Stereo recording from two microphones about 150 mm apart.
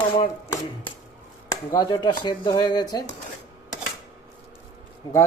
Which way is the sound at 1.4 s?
25° left (ahead or behind).